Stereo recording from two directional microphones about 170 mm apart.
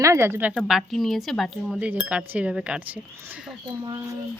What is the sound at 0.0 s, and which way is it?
Speech, 15° right (ahead or behind).